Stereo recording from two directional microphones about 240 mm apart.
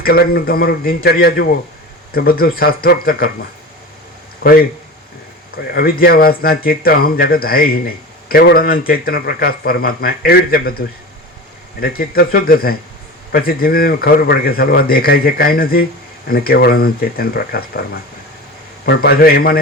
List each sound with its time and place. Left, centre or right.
0.0 s speech: left
4.4 s speech: left
5.7 s speech: left